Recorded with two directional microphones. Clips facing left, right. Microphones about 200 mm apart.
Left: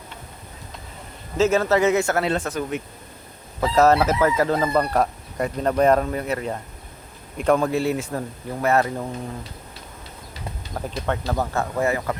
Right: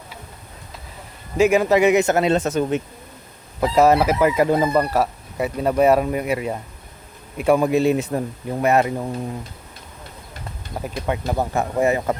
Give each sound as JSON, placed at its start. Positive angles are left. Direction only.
{"t": 1.4, "sound": "a man's voice", "side_deg": -15}
{"t": 3.6, "sound": "chicken", "side_deg": -10}
{"t": 10.8, "sound": "chicken", "side_deg": -10}